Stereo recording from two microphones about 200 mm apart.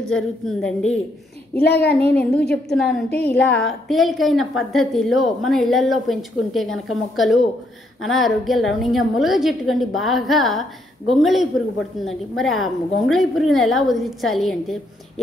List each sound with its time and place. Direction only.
0.1 s a woman's voice: 5° left (ahead or behind)
1.6 s a child's voice: 55° left (ahead or behind)
2.5 s a woman's voice: centre (ahead or behind)